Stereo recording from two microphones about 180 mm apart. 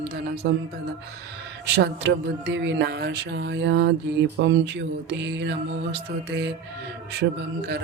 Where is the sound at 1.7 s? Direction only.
75° right (ahead or behind).